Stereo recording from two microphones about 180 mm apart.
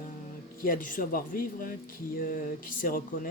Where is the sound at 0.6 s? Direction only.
50° left (ahead or behind).